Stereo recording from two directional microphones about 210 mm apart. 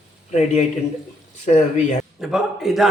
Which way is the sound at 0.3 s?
35° left (ahead or behind).